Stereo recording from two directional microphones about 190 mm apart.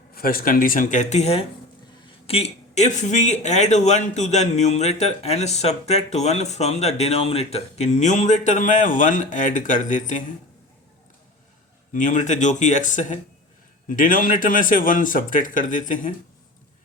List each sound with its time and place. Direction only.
0.1 s speech: 50° left (ahead or behind)
11.9 s speech: 40° left (ahead or behind)